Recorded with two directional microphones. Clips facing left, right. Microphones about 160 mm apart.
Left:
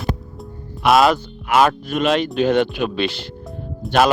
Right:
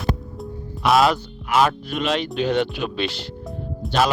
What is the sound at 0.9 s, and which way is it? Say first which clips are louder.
Speech: left 2 dB; 55° left (ahead or behind).